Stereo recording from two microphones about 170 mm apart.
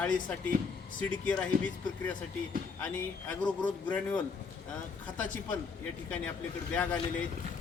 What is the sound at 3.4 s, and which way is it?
Speech, 5° left (ahead or behind).